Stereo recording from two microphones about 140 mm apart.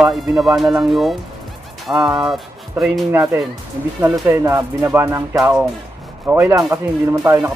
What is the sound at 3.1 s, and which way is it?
Speech, 15° right (ahead or behind).